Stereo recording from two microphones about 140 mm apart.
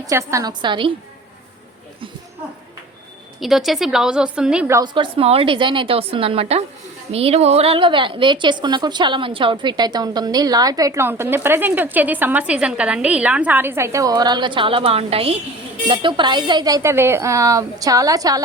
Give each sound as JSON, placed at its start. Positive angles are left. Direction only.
{"t": 0.0, "sound": "a woman's voice", "side_deg": -20}
{"t": 0.6, "sound": "a woman's voice", "side_deg": -35}
{"t": 3.4, "sound": "a woman's voice", "side_deg": 0}
{"t": 4.9, "sound": "a woman's voice", "side_deg": -40}